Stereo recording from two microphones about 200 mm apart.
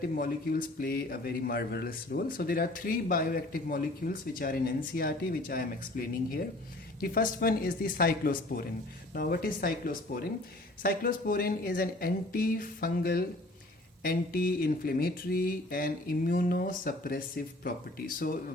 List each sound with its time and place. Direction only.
0.0 s a man's voice: 45° left (ahead or behind)